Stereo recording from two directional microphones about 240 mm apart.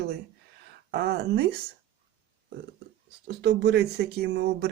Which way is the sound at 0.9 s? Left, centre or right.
Right.